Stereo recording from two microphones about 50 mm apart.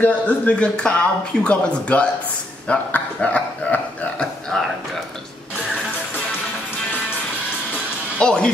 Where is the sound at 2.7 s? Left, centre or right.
Left.